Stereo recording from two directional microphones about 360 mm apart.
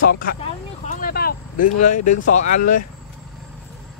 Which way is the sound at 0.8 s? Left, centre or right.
Left.